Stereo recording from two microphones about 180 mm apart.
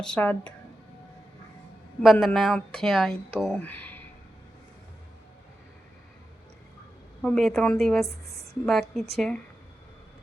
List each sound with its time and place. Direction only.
0.0 s speech: 5° left (ahead or behind)
2.0 s a woman's voice: 5° left (ahead or behind)
7.2 s a woman's voice: centre (ahead or behind)
8.0 s a woman's voice: 15° left (ahead or behind)
8.6 s a woman's voice: centre (ahead or behind)